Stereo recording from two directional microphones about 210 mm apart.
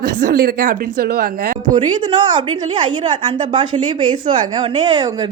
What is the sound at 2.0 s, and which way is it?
A woman's voice, 20° right (ahead or behind).